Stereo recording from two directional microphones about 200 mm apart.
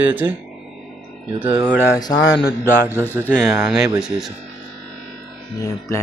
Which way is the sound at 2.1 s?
60° left (ahead or behind).